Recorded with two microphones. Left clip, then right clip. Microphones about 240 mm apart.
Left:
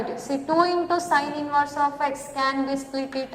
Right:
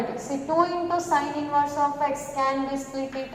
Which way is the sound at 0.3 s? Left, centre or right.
Left.